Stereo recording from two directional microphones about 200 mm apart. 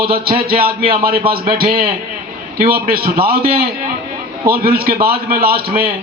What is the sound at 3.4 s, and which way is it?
Speech, 30° right (ahead or behind).